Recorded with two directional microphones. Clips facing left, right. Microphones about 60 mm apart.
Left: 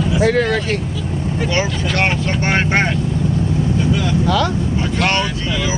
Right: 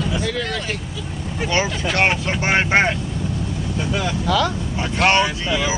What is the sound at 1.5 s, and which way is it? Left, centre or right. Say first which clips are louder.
Speech: right 1 dB; centre.